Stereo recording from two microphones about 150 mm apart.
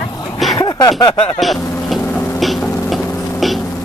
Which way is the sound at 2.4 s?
Centre (ahead or behind).